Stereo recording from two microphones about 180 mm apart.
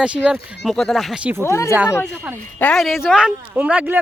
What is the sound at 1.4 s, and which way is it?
Speech, 15° left (ahead or behind).